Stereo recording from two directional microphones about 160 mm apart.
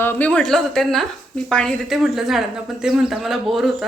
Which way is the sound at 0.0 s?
10° left (ahead or behind).